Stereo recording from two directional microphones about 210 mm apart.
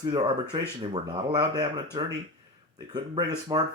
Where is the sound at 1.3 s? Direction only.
20° right (ahead or behind).